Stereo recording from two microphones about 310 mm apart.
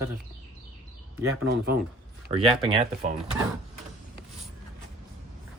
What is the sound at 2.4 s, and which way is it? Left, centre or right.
Speech, centre.